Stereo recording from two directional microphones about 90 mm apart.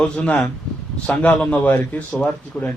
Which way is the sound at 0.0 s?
15° left (ahead or behind).